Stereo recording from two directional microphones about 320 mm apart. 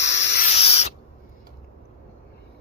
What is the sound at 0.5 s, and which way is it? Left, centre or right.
Spray, centre.